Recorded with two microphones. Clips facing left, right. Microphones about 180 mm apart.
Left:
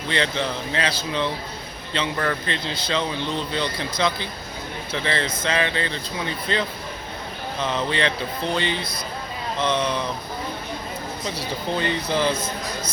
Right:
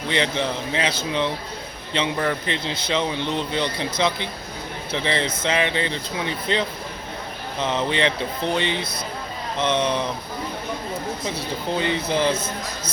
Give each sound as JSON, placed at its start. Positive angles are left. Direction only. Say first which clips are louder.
{"t": 0.1, "sound": "a man's voice", "louder": "right 1 dB", "side_deg": -20}
{"t": 11.3, "sound": "a man's voice", "louder": "left 1 dB", "side_deg": -20}